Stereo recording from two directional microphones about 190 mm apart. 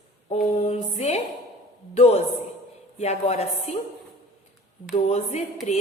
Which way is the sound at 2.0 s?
35° left (ahead or behind).